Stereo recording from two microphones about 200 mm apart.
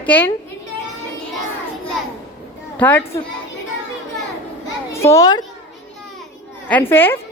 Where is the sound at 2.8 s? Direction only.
10° left (ahead or behind).